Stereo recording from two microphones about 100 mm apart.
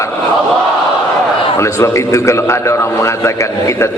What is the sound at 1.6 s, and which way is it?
A man's voice, 30° left (ahead or behind).